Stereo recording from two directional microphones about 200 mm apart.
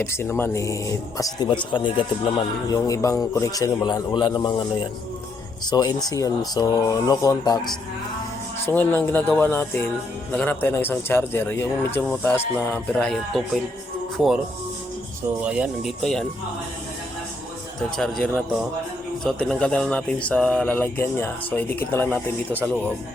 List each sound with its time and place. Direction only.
0.0 s speech: 10° left (ahead or behind)
5.7 s speech: 20° left (ahead or behind); by 13.4 s 5° left (ahead or behind)
15.4 s a man's voice: 5° right (ahead or behind)
17.9 s a man's voice: 5° left (ahead or behind)